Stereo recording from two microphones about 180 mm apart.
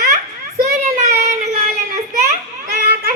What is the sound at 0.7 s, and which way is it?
Child singing, 40° right (ahead or behind).